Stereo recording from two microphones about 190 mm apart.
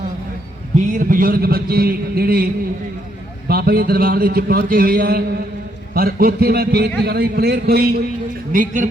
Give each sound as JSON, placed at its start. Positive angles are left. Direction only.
{"t": 0.9, "sound": "a man's voice", "side_deg": -45}
{"t": 3.5, "sound": "a man's voice", "side_deg": -55}
{"t": 8.5, "sound": "a man's voice", "side_deg": -40}